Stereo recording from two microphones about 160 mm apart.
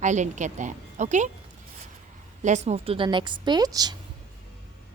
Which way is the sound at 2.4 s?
45° right (ahead or behind).